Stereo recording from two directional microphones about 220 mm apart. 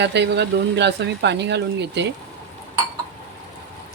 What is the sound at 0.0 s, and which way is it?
Speech, 50° right (ahead or behind).